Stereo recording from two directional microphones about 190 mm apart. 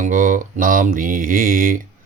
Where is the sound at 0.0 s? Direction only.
45° right (ahead or behind).